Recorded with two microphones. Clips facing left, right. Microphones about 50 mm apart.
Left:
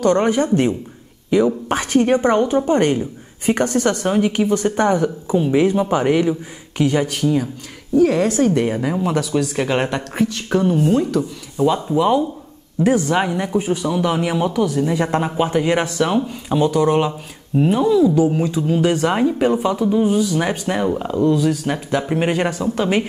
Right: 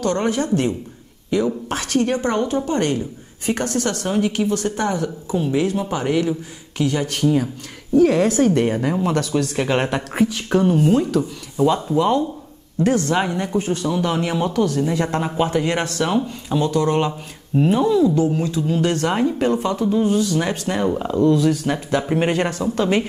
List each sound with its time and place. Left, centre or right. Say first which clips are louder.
0.0 s speech: left 5 dB; centre
7.1 s speech: even; centre
17.6 s speech: left 1 dB; centre